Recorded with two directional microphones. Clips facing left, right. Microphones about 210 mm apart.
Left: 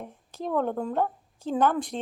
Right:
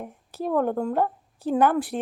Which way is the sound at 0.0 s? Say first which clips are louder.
Right 4 dB; 10° right (ahead or behind).